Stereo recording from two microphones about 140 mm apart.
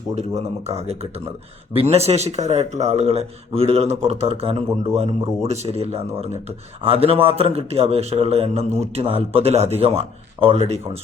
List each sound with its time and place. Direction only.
0.2 s a man's voice: 50° right (ahead or behind)